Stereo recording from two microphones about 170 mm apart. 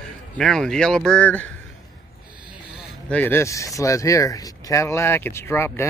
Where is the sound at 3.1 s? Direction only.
10° left (ahead or behind).